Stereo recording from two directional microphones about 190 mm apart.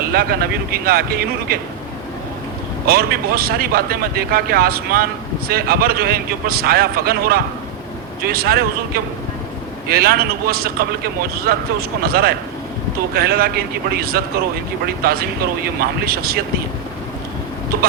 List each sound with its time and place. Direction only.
0.1 s speech: 55° right (ahead or behind)
2.8 s speech: 55° right (ahead or behind)